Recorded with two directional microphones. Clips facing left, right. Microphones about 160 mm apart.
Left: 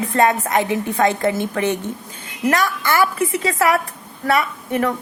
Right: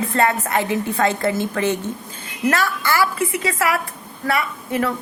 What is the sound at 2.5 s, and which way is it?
A woman's voice, 20° left (ahead or behind).